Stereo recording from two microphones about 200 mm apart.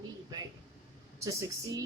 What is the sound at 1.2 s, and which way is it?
Speech, 15° right (ahead or behind).